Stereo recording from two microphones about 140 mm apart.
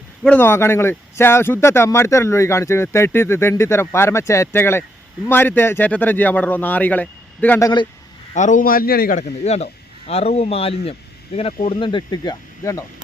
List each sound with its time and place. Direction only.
0.2 s speech: 10° left (ahead or behind)
7.6 s speech: 30° left (ahead or behind)
8.3 s a man's voice: 60° left (ahead or behind); by 9.2 s 90° left
9.4 s speech: 55° left (ahead or behind); by 12.8 s 25° left (ahead or behind)